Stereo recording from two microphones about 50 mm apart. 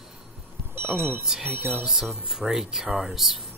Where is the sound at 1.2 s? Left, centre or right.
Centre.